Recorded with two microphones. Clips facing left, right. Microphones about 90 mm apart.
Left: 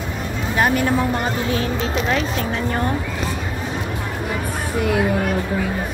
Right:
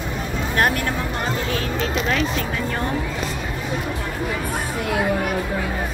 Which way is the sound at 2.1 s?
30° left (ahead or behind).